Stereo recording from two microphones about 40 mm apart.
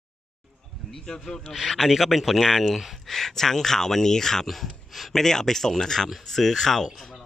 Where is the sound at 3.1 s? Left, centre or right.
Centre.